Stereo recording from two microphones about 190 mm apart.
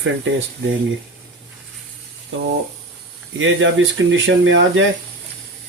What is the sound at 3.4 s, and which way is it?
Speech, 90° right.